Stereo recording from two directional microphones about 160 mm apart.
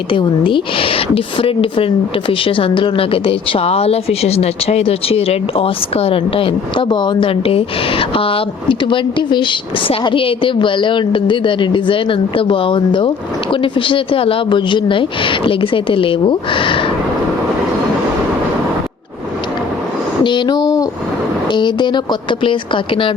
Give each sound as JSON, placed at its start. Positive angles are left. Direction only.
{"t": 0.1, "sound": "a woman's voice", "side_deg": 30}
{"t": 20.2, "sound": "a woman's voice", "side_deg": 30}